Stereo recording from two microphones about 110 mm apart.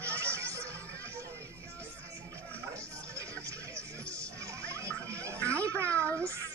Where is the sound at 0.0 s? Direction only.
25° right (ahead or behind).